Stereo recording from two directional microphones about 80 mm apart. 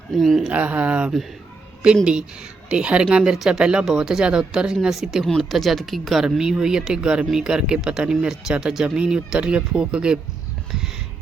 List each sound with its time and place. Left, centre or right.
0.1 s speech: centre
0.4 s speech: centre